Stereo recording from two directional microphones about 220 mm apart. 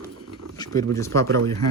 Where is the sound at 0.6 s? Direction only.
15° left (ahead or behind).